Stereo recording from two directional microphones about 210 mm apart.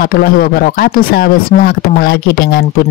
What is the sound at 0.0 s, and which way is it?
Speech, 45° left (ahead or behind).